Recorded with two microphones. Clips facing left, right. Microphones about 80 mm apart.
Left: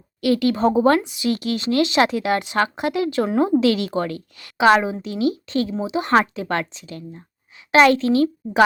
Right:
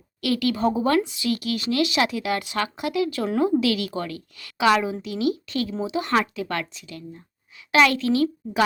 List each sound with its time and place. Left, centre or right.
0.2 s a woman's voice: left
1.0 s a woman's voice: left